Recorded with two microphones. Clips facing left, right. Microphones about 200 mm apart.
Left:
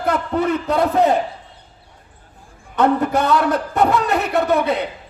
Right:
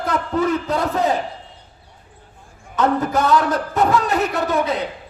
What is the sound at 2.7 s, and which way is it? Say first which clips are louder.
A man's voice: left 2 dB; 60° left (ahead or behind).